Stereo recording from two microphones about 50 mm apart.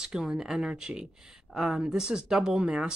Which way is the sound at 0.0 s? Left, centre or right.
Centre.